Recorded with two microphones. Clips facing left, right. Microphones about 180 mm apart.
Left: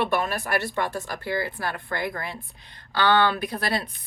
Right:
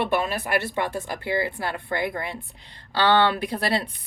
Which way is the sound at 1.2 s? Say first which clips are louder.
Right 2 dB; 20° right (ahead or behind).